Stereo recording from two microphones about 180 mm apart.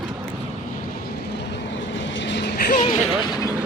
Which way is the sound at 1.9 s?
85° left.